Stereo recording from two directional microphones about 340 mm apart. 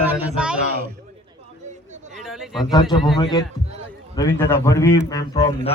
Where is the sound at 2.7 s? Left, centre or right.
Centre.